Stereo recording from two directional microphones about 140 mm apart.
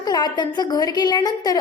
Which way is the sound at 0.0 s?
30° left (ahead or behind).